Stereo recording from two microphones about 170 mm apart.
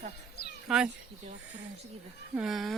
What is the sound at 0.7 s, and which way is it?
Speech, 5° right (ahead or behind).